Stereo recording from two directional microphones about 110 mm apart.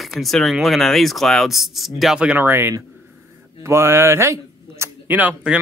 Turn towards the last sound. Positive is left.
turn(degrees=-10)  # may be behind; listen again after turning